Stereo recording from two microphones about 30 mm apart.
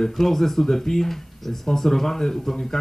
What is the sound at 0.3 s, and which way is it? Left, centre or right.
A man's voice, centre.